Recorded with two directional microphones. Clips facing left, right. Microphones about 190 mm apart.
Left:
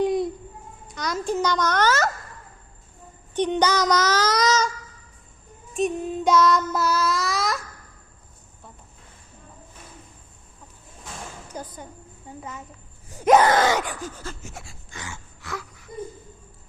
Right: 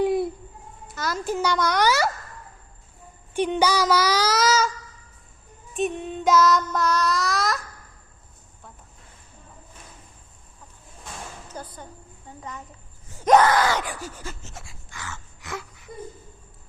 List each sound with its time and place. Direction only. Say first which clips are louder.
0.0 s a sound: even; 5° right (ahead or behind)
0.9 s speech: left 1 dB; 5° right (ahead or behind)
3.3 s speech: even; 10° right (ahead or behind)
5.7 s child singing: left 2 dB; centre (ahead or behind)
11.5 s a sound: left 2 dB; 15° left (ahead or behind)
12.4 s a woman's voice: even; 5° left (ahead or behind)
13.1 s groan: left 1 dB; 5° left (ahead or behind)
13.4 s groan: left 1 dB; 20° left (ahead or behind)
13.9 s speech: left 1 dB; 10° right (ahead or behind)
14.6 s child singing: left 2 dB; centre (ahead or behind)
14.9 s a sound: even; 15° left (ahead or behind)
15.4 s a sound: even; 20° right (ahead or behind)